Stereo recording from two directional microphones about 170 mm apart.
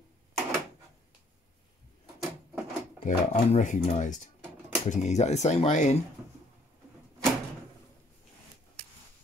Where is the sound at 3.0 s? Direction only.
45° left (ahead or behind).